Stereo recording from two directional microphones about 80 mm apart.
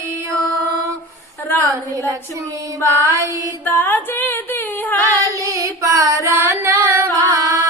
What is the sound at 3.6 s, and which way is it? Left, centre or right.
Music, left.